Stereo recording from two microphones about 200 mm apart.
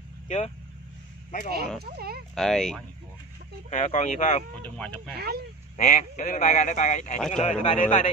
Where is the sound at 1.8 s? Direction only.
50° right (ahead or behind).